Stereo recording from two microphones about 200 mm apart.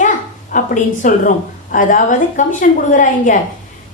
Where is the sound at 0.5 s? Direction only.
40° left (ahead or behind).